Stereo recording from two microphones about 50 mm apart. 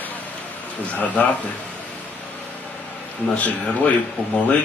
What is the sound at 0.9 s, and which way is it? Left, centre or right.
Speech, left.